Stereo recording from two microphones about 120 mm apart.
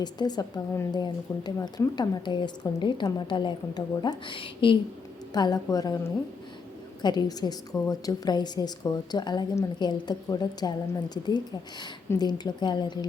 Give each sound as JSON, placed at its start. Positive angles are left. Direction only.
{"t": 0.0, "sound": "a woman's voice", "side_deg": 35}
{"t": 5.3, "sound": "a woman's voice", "side_deg": 35}
{"t": 7.0, "sound": "a woman's voice", "side_deg": 35}